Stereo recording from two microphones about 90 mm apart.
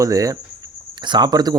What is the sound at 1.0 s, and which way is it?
Speech, 55° right (ahead or behind).